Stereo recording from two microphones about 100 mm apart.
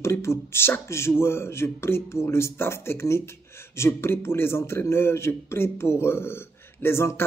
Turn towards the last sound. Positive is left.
turn(degrees=25)  # may be behind; listen again after turning